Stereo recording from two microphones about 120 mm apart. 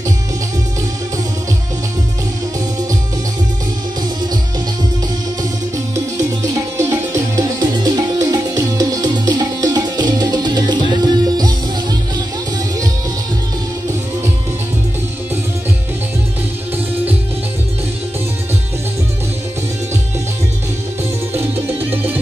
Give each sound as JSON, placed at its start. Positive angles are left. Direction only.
{"t": 6.1, "sound": "music", "side_deg": -25}
{"t": 21.3, "sound": "music", "side_deg": -15}